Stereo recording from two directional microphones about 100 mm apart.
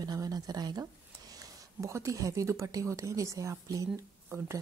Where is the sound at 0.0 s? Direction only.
40° right (ahead or behind).